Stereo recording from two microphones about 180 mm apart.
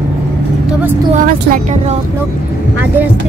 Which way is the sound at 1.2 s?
45° right (ahead or behind).